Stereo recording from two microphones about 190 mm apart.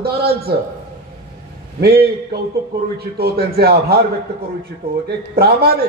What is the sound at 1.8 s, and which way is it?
A man's voice, 55° right (ahead or behind).